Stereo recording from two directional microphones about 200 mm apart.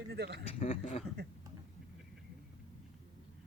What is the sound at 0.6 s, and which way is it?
Speech, 35° left (ahead or behind).